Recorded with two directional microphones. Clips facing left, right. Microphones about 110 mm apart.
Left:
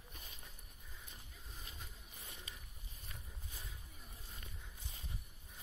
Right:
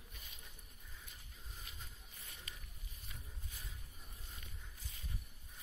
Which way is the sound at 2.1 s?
20° left (ahead or behind).